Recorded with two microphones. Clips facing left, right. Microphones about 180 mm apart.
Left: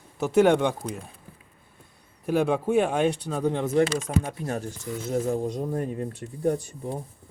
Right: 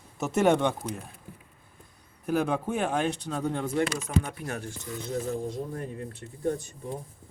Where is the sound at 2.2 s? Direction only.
5° left (ahead or behind).